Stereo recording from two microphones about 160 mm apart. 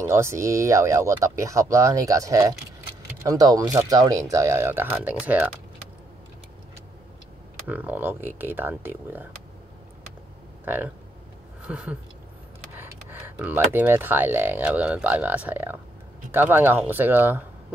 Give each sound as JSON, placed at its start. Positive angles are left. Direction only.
{"t": 0.0, "sound": "speech", "side_deg": -15}
{"t": 7.6, "sound": "speech", "side_deg": -10}
{"t": 10.6, "sound": "speech", "side_deg": -10}
{"t": 11.6, "sound": "a sound", "side_deg": -5}
{"t": 12.7, "sound": "speech", "side_deg": -10}